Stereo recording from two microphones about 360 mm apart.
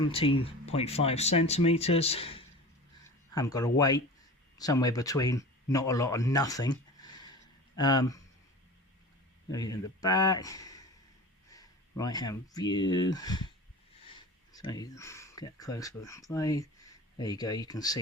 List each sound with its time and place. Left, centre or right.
0.0 s speech: centre
9.5 s speech: centre